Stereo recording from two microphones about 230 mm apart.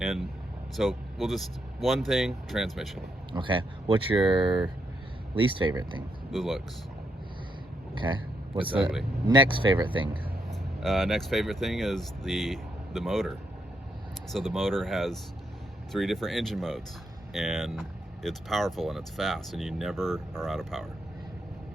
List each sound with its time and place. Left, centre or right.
0.0 s vehicle: centre
0.8 s speech: centre
3.3 s speech: right
6.3 s speech: centre
7.9 s speech: right
8.7 s speech: centre
9.2 s speech: centre
10.5 s speech: centre
14.3 s speech: centre